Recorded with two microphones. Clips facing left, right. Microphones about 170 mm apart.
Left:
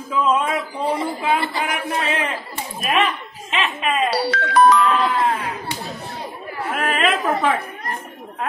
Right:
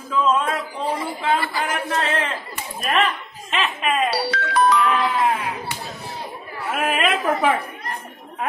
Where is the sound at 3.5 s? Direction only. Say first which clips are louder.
Even; centre (ahead or behind).